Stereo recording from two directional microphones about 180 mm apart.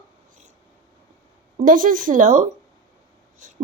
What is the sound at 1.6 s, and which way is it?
A woman's voice, 50° right (ahead or behind).